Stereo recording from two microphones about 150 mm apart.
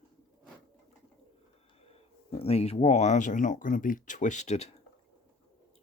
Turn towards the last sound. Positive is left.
turn(degrees=45)  # may be behind; listen again after turning